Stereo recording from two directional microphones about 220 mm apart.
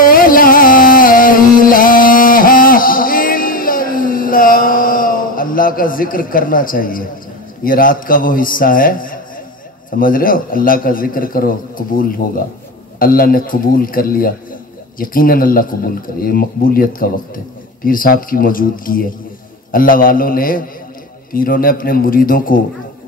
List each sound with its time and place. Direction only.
0.0 s music: 40° left (ahead or behind)
7.6 s a man's voice: 40° left (ahead or behind)